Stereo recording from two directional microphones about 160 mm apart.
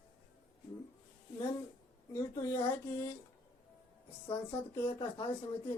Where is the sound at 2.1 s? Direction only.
20° left (ahead or behind).